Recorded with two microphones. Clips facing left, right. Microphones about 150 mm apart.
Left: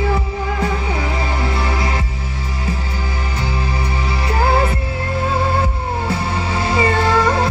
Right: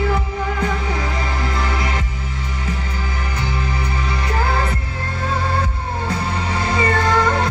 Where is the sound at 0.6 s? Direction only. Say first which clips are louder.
Left 2 dB; 30° left (ahead or behind).